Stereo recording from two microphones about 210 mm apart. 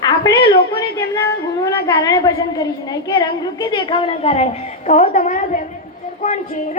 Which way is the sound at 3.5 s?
20° left (ahead or behind).